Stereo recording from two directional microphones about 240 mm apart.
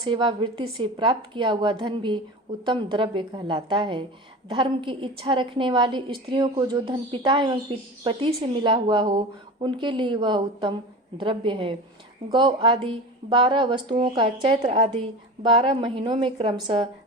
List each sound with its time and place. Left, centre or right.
0.0 s a woman's voice: centre